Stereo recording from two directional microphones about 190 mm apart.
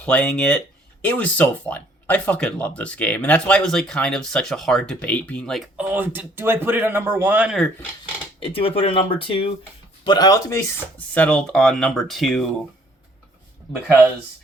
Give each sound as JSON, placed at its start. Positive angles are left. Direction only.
{"t": 0.0, "sound": "speech", "side_deg": 5}
{"t": 8.5, "sound": "speech", "side_deg": 30}